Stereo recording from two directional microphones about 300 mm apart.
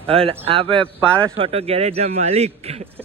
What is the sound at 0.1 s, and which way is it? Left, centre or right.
A man's voice, centre.